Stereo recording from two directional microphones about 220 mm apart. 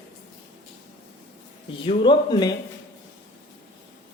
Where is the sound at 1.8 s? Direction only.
20° left (ahead or behind).